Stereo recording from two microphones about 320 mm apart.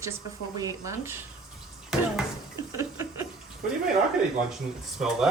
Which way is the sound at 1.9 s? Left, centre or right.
Centre.